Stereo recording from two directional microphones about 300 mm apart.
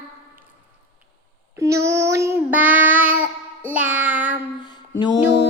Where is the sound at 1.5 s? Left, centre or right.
Centre.